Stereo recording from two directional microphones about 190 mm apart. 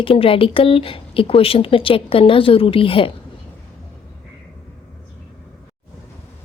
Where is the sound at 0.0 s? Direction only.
30° left (ahead or behind).